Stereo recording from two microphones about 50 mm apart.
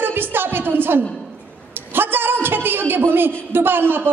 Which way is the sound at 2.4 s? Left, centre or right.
Right.